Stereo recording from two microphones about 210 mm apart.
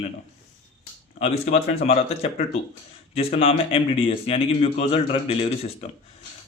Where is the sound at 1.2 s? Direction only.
30° left (ahead or behind).